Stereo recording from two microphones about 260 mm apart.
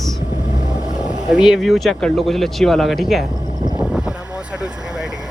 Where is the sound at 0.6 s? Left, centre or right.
Centre.